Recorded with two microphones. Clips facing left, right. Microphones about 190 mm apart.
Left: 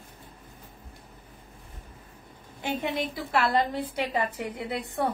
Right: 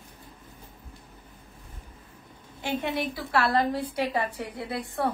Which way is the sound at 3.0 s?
20° left (ahead or behind).